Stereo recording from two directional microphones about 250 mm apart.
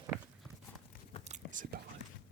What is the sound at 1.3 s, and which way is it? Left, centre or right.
Whispering, right.